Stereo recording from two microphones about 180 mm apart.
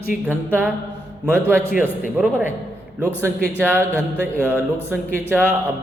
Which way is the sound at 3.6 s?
10° right (ahead or behind).